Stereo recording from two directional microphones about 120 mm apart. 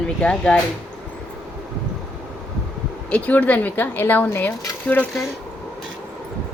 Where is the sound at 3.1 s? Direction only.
15° left (ahead or behind).